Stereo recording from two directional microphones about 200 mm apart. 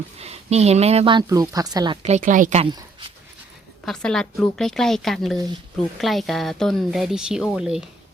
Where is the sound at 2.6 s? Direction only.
25° right (ahead or behind).